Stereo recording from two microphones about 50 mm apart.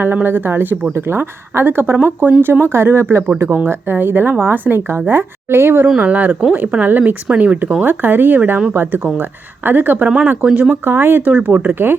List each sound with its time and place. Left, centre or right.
0.0 s speech: right
0.9 s speech: right
3.5 s speech: right
6.0 s speech: right
10.4 s speech: right
10.8 s speech: right
11.3 s speech: right